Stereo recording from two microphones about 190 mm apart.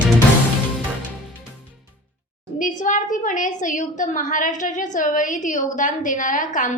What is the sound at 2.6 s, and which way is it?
A woman's voice, 40° left (ahead or behind).